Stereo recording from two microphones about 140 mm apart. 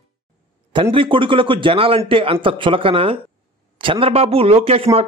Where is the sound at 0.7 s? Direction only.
40° right (ahead or behind).